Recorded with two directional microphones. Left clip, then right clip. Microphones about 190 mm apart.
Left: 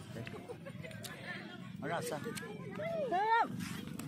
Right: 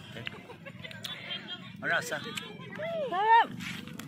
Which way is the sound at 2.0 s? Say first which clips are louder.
Right 7 dB; 5° left (ahead or behind).